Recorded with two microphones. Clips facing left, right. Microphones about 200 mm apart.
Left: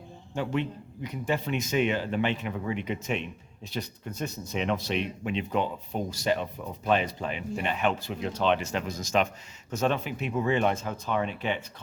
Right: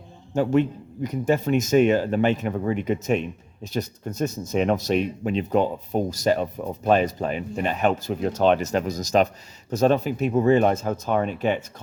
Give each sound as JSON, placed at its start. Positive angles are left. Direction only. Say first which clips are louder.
{"t": 0.3, "sound": "a man's voice", "louder": "right 9 dB", "side_deg": -45}